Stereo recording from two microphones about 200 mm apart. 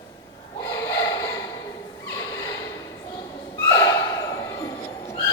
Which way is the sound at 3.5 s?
15° left (ahead or behind).